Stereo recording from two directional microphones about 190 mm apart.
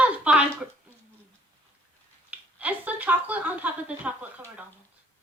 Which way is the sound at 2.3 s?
10° right (ahead or behind).